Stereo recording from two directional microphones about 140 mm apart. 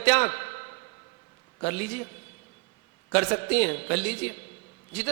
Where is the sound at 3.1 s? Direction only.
20° left (ahead or behind).